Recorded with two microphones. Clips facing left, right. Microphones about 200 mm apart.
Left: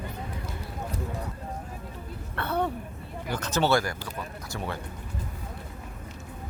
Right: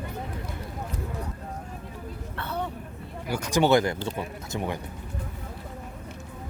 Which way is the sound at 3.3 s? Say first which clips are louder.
Right 3 dB; 10° right (ahead or behind).